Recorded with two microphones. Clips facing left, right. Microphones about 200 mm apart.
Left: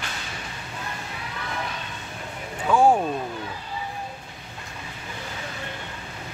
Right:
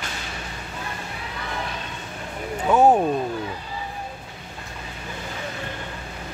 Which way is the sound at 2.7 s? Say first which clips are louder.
Right 2 dB; 20° right (ahead or behind).